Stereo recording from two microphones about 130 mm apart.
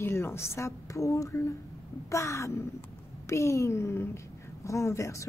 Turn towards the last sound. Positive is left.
turn(degrees=25)  # may be behind; listen again after turning